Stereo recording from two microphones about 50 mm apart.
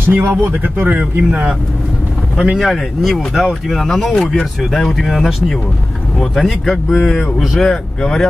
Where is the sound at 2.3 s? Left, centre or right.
Centre.